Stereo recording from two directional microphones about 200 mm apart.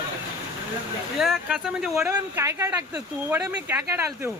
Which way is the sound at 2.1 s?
15° right (ahead or behind).